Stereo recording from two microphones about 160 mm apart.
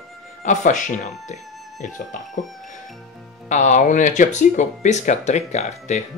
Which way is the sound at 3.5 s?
50° left (ahead or behind).